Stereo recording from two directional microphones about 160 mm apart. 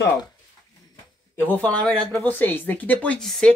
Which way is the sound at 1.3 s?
10° left (ahead or behind).